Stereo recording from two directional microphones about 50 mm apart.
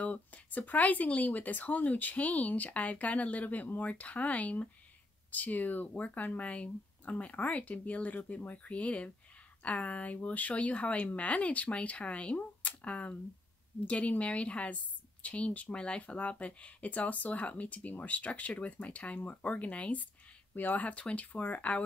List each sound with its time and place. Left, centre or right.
0.0 s speech: left